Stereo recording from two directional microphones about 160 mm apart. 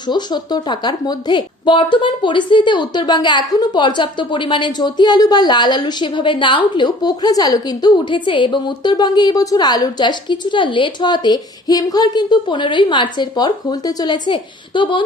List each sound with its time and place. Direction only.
0.1 s a woman's voice: 25° left (ahead or behind)